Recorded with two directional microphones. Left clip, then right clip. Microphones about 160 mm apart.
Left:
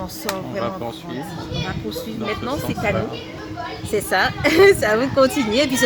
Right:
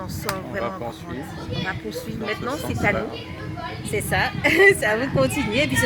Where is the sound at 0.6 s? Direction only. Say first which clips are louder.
Left 2 dB; 10° right (ahead or behind).